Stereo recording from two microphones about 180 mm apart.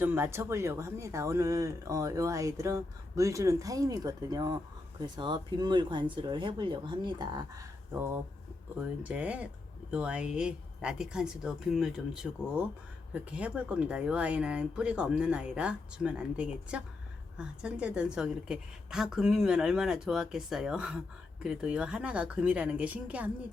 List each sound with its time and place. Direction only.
0.0 s speech: 10° right (ahead or behind)
8.8 s a woman's voice: 5° right (ahead or behind)